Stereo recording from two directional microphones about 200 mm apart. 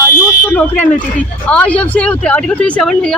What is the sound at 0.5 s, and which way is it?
Speech, 10° left (ahead or behind).